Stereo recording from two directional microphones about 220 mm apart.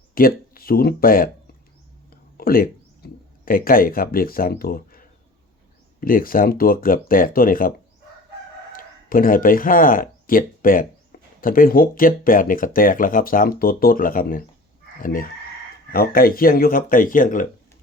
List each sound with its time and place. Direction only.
0.1 s speech: 40° left (ahead or behind)
2.0 s a sound: 40° left (ahead or behind)
6.0 s speech: 40° left (ahead or behind)
8.7 s speech: 40° left (ahead or behind)